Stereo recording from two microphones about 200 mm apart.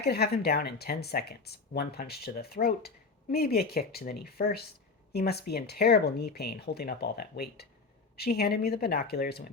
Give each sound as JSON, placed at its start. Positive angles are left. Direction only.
{"t": 0.0, "sound": "speech", "side_deg": 55}